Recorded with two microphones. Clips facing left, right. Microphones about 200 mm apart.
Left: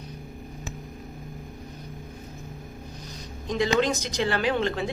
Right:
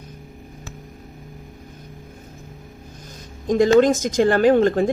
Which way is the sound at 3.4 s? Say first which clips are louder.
Right 9 dB; 45° right (ahead or behind).